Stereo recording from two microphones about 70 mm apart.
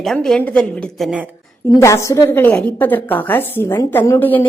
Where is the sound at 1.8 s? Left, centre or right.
Left.